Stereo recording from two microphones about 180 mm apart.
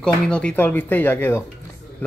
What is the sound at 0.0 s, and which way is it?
Speech, 5° left (ahead or behind).